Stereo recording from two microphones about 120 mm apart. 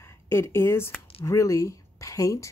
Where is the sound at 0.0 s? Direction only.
20° left (ahead or behind).